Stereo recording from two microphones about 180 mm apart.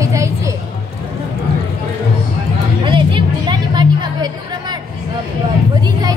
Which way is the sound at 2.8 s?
25° right (ahead or behind).